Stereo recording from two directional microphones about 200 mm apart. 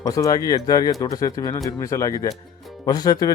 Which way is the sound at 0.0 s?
20° left (ahead or behind).